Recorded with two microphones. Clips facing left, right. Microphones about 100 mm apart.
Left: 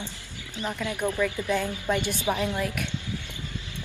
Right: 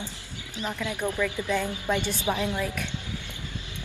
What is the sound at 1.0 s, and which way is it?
Speech, 15° left (ahead or behind).